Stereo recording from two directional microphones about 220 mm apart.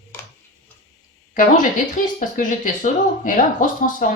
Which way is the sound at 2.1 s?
35° left (ahead or behind).